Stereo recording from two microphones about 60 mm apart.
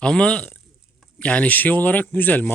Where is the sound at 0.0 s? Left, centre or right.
Centre.